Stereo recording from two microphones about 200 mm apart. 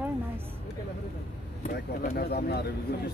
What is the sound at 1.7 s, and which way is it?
Speech, 50° left (ahead or behind).